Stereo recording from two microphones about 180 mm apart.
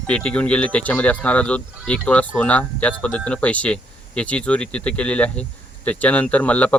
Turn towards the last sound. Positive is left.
turn(degrees=10)  # may be behind; listen again after turning